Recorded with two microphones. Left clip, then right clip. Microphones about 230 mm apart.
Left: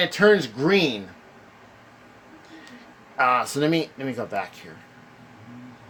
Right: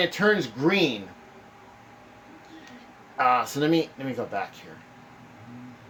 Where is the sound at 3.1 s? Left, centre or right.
Left.